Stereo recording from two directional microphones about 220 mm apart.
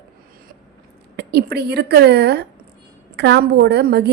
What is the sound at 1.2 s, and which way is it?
A woman's voice, 50° right (ahead or behind).